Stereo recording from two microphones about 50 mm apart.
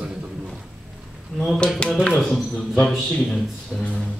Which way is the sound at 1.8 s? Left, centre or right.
Left.